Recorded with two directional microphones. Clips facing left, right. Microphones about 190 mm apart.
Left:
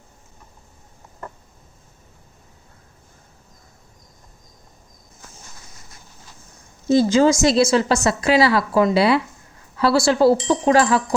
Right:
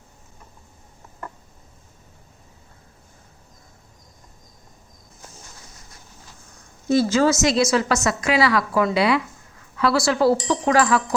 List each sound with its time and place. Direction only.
6.8 s a woman's voice: 25° left (ahead or behind)